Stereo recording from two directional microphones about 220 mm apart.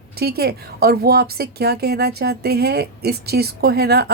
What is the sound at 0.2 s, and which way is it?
A woman's voice, 45° right (ahead or behind).